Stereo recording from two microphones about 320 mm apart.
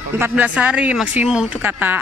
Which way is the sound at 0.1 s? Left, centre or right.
Centre.